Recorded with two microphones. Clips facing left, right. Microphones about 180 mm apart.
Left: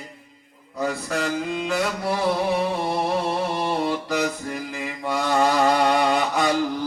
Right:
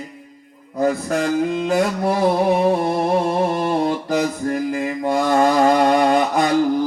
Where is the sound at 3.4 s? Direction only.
50° right (ahead or behind).